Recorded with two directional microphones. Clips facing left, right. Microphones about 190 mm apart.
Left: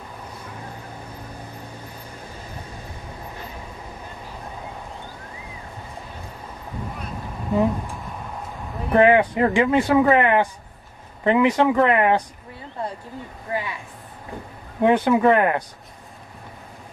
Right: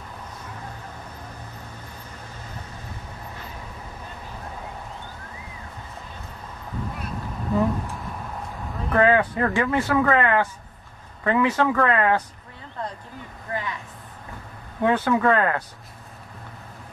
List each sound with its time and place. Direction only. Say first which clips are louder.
7.5 s speech: left 2 dB; 20° left (ahead or behind)
8.9 s speech: left 4 dB; 20° left (ahead or behind)
13.5 s speech: left 2 dB; 10° left (ahead or behind)